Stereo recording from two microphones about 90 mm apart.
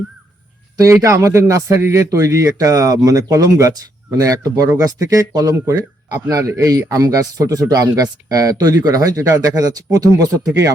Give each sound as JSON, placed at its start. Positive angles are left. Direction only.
{"t": 0.8, "sound": "speech", "side_deg": -35}
{"t": 5.5, "sound": "speech", "side_deg": -30}